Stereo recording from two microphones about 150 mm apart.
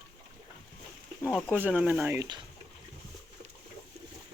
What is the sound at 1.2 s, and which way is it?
Speech, 5° left (ahead or behind).